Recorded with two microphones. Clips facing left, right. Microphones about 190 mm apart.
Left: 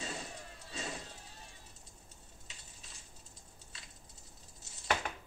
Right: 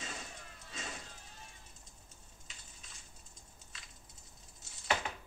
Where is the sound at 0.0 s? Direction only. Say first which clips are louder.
Left 4 dB; 35° left (ahead or behind).